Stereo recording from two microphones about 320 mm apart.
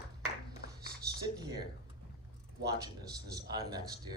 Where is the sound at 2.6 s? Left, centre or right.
Centre.